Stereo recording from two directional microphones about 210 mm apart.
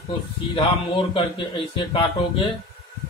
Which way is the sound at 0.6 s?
25° left (ahead or behind).